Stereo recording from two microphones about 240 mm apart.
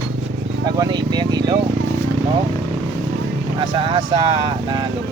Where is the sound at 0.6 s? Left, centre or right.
Centre.